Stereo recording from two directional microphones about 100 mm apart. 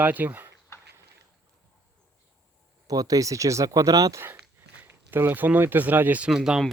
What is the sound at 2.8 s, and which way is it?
Speech, 35° right (ahead or behind).